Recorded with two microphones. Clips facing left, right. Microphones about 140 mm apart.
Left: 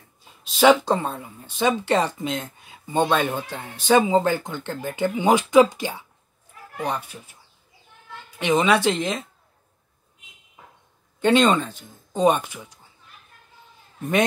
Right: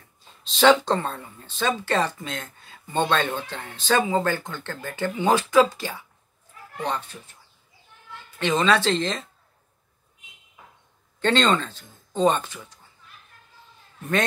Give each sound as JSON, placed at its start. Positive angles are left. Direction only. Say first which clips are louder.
{"t": 0.2, "sound": "speech", "louder": "left 2 dB", "side_deg": 10}
{"t": 8.4, "sound": "speech", "louder": "left 2 dB", "side_deg": 15}
{"t": 11.1, "sound": "speech", "louder": "left 3 dB", "side_deg": 10}